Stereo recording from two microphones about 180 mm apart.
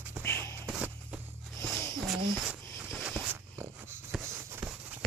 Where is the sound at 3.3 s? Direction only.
15° right (ahead or behind).